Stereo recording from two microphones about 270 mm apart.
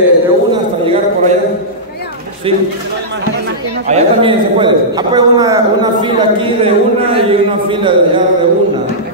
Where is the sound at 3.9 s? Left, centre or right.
Right.